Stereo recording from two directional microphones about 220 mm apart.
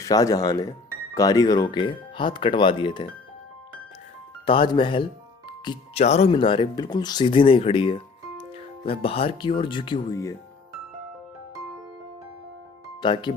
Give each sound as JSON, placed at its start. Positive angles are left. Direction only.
{"t": 0.0, "sound": "speech", "side_deg": 15}
{"t": 4.4, "sound": "speech", "side_deg": 25}
{"t": 13.0, "sound": "speech", "side_deg": 20}